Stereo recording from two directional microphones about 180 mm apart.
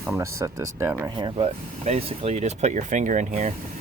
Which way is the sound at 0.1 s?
15° right (ahead or behind).